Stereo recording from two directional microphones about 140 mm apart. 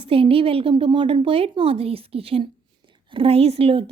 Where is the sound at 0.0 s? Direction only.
40° right (ahead or behind).